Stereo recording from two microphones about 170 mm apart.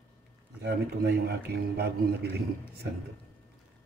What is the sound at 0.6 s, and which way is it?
Speech, 65° right (ahead or behind).